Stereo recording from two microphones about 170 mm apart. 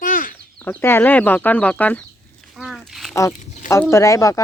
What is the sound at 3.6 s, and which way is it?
Speech, 10° left (ahead or behind).